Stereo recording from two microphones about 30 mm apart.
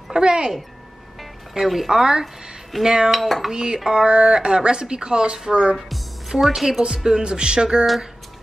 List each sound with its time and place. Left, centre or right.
0.1 s speech: right
1.5 s speech: centre
1.9 s speech: right
3.1 s dishes: centre
3.5 s a woman's voice: right
6.4 s speech: centre
7.1 s speech: right